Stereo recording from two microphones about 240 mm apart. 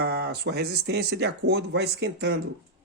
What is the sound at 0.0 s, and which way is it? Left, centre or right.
Speech, right.